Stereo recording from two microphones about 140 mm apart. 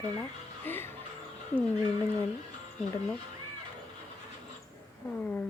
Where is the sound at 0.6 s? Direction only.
15° left (ahead or behind).